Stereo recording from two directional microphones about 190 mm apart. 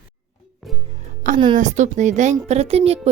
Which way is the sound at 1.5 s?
40° right (ahead or behind).